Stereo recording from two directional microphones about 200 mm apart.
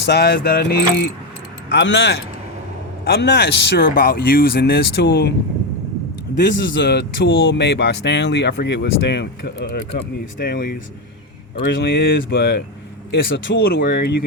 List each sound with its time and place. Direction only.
0.0 s mechanisms: 55° left (ahead or behind)
1.7 s speech: 60° left (ahead or behind)
6.8 s speech: 55° left (ahead or behind)
10.4 s mechanisms: 45° left (ahead or behind)
13.1 s speech: 60° left (ahead or behind)